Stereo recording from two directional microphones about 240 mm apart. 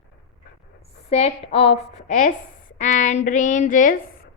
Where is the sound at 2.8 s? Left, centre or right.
Left.